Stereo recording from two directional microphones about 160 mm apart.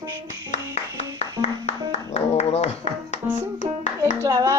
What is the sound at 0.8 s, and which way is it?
Clapping, 45° left (ahead or behind).